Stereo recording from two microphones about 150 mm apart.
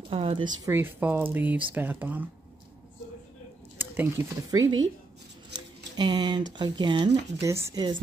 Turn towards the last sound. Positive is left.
turn(degrees=-30)  # may be behind; listen again after turning